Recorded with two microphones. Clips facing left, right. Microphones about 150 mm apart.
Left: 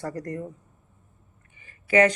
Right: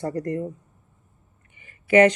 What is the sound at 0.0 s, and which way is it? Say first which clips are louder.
Speech: right 5 dB; 25° right (ahead or behind).